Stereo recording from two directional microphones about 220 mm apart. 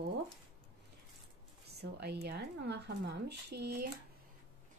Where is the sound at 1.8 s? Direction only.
50° right (ahead or behind).